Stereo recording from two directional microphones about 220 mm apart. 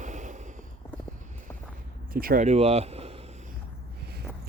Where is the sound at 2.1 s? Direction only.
40° right (ahead or behind).